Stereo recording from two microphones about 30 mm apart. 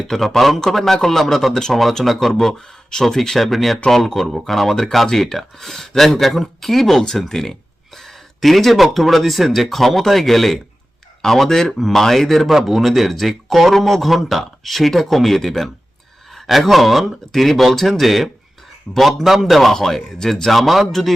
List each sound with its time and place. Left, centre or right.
0.1 s speech: centre
2.4 s speech: centre
3.2 s speech: centre
12.5 s speech: centre
19.7 s speech: centre